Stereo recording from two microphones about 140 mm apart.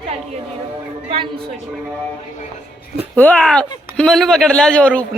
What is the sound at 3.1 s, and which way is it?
A man's voice, 10° left (ahead or behind).